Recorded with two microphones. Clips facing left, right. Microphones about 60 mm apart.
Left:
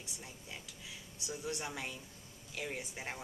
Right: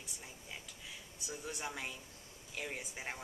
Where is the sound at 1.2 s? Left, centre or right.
Centre.